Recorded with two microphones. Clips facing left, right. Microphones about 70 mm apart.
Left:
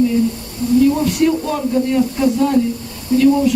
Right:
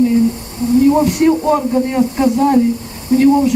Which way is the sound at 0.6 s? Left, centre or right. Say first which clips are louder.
Right 3 dB; right.